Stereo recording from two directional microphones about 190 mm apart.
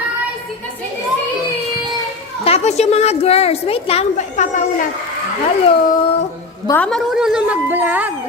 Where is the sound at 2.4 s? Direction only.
35° left (ahead or behind).